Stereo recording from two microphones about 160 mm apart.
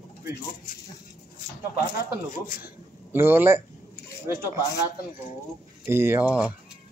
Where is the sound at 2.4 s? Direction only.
60° left (ahead or behind).